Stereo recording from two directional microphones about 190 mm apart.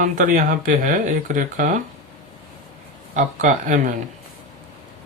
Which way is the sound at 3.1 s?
40° right (ahead or behind).